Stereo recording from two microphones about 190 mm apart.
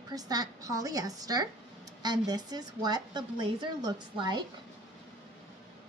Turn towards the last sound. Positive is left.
turn(degrees=-25)  # may be behind; listen again after turning